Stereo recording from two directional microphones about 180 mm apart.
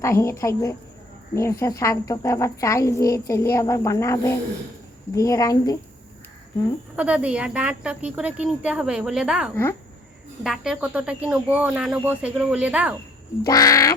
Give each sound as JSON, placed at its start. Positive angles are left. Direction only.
{"t": 0.0, "sound": "a woman's voice", "side_deg": 15}
{"t": 6.9, "sound": "speech", "side_deg": -5}
{"t": 13.4, "sound": "quack", "side_deg": 20}